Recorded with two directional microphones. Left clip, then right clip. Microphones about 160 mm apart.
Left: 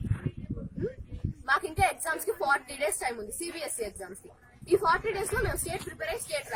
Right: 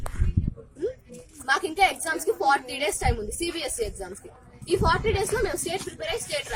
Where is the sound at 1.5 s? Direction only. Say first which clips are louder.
Right 4 dB; centre (ahead or behind).